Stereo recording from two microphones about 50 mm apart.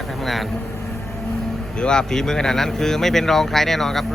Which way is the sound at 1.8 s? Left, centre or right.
Centre.